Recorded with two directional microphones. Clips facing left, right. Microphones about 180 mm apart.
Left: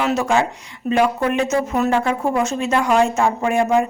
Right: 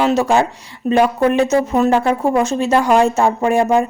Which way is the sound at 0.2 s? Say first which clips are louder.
Right 3 dB; 35° right (ahead or behind).